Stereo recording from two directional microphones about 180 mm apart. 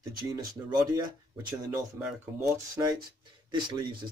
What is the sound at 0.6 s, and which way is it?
Speech, 15° right (ahead or behind).